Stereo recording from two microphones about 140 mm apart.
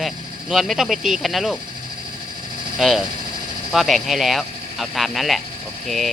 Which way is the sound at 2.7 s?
Centre (ahead or behind).